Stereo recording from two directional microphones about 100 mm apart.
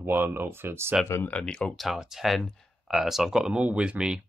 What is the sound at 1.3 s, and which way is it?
Speech, 10° left (ahead or behind).